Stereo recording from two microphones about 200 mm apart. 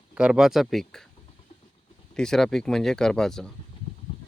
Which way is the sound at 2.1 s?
5° left (ahead or behind).